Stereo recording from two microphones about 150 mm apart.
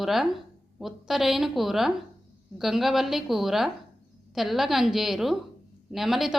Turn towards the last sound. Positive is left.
turn(degrees=0)  # may be behind; listen again after turning